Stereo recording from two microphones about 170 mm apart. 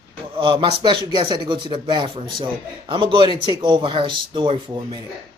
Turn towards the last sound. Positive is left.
turn(degrees=-30)  # may be behind; listen again after turning